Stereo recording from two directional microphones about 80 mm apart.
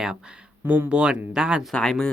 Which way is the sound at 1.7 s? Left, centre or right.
Centre.